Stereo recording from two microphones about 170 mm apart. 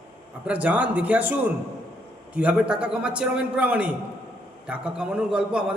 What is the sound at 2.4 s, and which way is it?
A man's voice, 5° right (ahead or behind).